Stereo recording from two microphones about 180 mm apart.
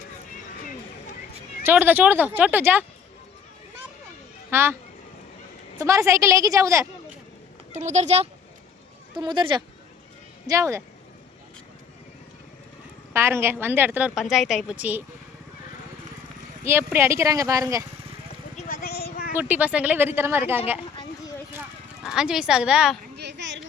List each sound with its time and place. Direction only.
1.6 s a woman's voice: 10° right (ahead or behind)
4.5 s a woman's voice: 15° right (ahead or behind)
5.8 s a woman's voice: 15° right (ahead or behind)
7.7 s speech: 40° right (ahead or behind)
9.1 s a woman's voice: 25° right (ahead or behind)
13.1 s a woman's voice: 15° right (ahead or behind)
16.6 s a woman's voice: 15° right (ahead or behind)
18.5 s a sound: 50° left (ahead or behind)
19.3 s a woman's voice: 10° right (ahead or behind)
22.0 s speech: 5° right (ahead or behind)
23.1 s a sound: 75° right (ahead or behind)